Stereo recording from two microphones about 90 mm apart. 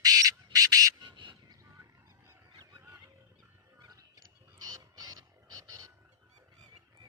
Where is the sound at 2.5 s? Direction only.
50° right (ahead or behind).